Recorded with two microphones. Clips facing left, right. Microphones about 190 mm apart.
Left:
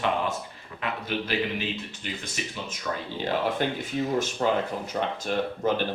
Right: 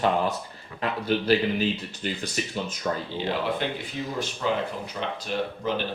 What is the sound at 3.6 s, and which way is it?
Speech, 45° left (ahead or behind).